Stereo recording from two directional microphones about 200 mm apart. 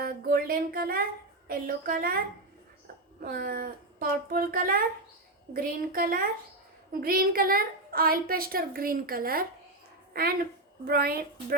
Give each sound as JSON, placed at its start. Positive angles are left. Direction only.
{"t": 0.0, "sound": "a woman's voice", "side_deg": -50}
{"t": 10.1, "sound": "a sound", "side_deg": -50}
{"t": 10.8, "sound": "a woman's voice", "side_deg": -50}